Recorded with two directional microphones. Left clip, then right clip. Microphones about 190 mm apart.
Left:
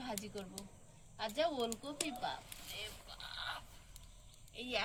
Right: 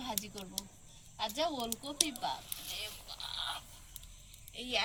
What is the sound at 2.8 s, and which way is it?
Grunt, 15° left (ahead or behind).